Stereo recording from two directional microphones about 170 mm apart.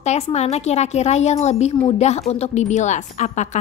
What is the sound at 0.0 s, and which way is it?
A woman's voice, 40° left (ahead or behind).